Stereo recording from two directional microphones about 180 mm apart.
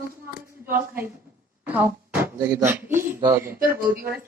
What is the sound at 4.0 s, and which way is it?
Speech, 60° right (ahead or behind).